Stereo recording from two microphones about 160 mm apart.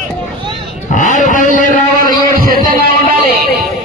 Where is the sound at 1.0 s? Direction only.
50° left (ahead or behind).